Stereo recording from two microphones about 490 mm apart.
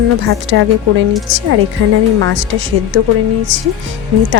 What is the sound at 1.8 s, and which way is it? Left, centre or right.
Speech, right.